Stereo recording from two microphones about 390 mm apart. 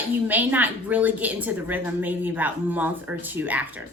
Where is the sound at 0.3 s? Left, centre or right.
Centre.